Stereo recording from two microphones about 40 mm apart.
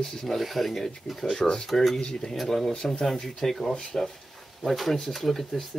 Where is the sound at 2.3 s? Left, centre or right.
Centre.